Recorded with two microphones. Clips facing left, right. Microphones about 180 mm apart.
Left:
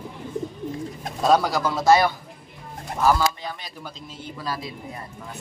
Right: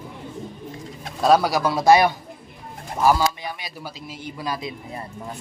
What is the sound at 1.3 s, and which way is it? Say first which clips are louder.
A man's voice: right 2 dB; 10° right (ahead or behind).